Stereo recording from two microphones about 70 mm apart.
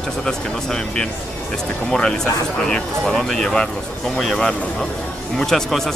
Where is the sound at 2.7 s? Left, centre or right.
Centre.